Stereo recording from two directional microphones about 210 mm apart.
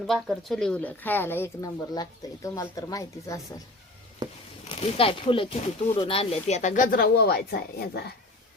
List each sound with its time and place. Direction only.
0.1 s speech: centre (ahead or behind)
4.2 s a sound: 20° right (ahead or behind)
4.7 s speech: 25° left (ahead or behind); by 8.1 s 50° left (ahead or behind)